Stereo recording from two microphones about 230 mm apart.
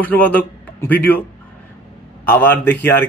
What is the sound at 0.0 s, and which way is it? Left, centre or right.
A man's voice, centre.